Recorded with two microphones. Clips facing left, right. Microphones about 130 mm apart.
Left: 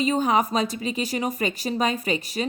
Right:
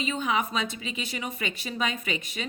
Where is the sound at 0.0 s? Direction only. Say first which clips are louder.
Left 7 dB; 40° left (ahead or behind).